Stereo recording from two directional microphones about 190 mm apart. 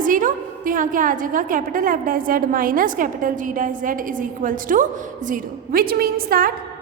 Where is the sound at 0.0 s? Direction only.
45° right (ahead or behind).